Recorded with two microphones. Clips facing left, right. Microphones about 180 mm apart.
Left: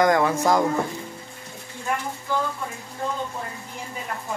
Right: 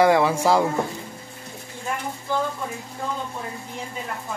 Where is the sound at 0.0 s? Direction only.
10° right (ahead or behind).